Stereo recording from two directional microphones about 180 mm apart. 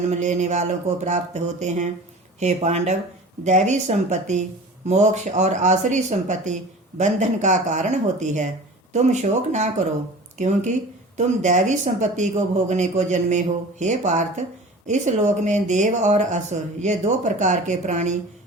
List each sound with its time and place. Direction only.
0.1 s speech: 40° right (ahead or behind)